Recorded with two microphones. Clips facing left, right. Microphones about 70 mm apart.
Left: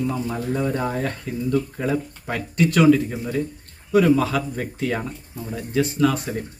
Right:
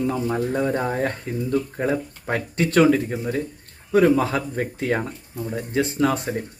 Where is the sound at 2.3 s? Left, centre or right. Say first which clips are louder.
Even; right.